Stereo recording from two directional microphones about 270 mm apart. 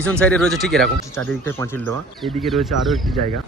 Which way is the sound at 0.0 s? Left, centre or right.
Centre.